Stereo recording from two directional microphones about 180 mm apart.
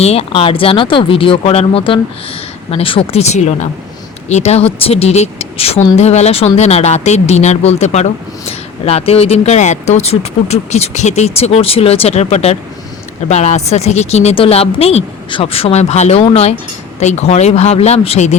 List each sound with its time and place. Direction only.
0.0 s speech: 35° left (ahead or behind)